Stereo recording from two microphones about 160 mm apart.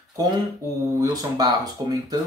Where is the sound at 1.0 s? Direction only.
25° right (ahead or behind).